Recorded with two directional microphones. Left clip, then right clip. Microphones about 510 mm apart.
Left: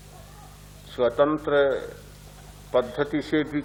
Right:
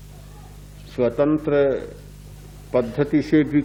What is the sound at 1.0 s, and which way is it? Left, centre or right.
A man's voice, centre.